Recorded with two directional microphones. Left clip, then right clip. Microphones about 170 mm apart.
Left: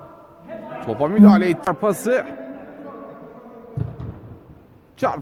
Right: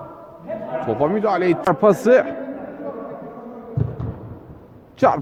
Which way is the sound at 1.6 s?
Centre (ahead or behind).